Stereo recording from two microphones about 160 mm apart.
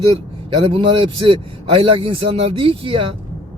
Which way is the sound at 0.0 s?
35° right (ahead or behind).